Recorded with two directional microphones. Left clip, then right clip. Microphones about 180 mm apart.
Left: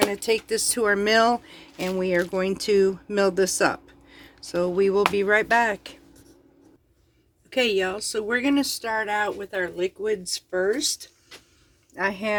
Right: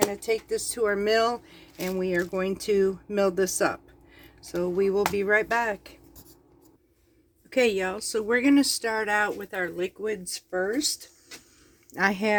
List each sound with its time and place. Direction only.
0.0 s speech: 60° left (ahead or behind); by 3.8 s 25° left (ahead or behind)
4.2 s a sound: 25° left (ahead or behind)
5.1 s speech: 15° left (ahead or behind)
7.5 s speech: 25° right (ahead or behind)
11.9 s speech: 60° right (ahead or behind)